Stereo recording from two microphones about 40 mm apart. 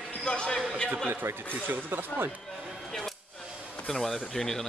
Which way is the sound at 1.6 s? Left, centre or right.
Right.